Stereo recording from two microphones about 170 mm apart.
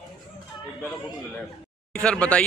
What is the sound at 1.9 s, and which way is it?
Speech, 5° left (ahead or behind).